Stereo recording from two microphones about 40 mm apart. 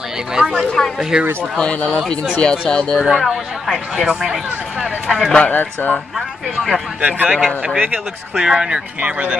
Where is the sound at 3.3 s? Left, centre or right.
Centre.